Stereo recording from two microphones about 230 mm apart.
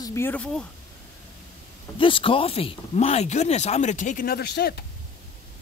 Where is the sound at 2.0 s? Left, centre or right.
Left.